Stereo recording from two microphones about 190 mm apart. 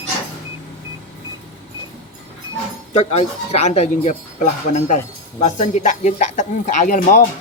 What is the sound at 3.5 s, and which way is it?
Speech, 35° left (ahead or behind).